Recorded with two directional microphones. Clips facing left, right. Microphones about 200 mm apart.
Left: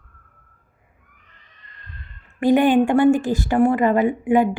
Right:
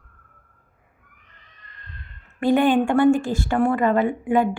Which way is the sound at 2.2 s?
20° left (ahead or behind).